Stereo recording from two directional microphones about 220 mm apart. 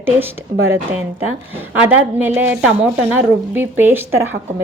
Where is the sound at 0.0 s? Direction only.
10° right (ahead or behind).